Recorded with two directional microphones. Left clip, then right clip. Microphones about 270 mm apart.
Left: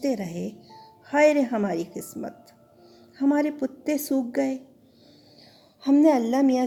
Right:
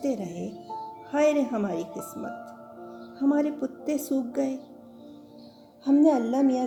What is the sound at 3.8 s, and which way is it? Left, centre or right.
Speech, left.